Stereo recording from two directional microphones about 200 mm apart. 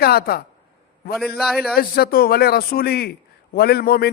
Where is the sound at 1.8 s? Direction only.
50° left (ahead or behind).